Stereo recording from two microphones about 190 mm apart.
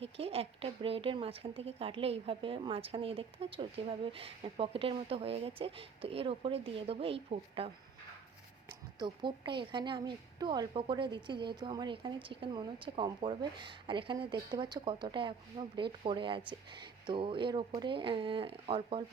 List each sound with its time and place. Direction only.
0.0 s a woman's voice: 30° right (ahead or behind)
9.0 s a woman's voice: 25° right (ahead or behind)